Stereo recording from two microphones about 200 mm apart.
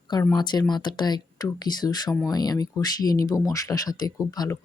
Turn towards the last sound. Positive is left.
turn(degrees=20)  # may be behind; listen again after turning